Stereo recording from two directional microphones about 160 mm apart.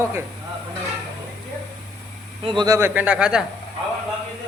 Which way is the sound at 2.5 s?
25° right (ahead or behind).